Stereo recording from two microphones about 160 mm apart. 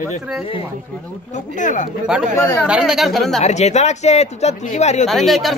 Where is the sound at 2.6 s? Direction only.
5° right (ahead or behind).